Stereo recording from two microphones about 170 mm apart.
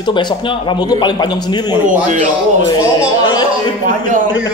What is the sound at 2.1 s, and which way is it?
Speech, 45° right (ahead or behind).